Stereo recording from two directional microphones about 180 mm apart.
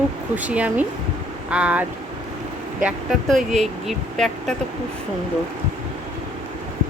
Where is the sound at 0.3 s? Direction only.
10° right (ahead or behind).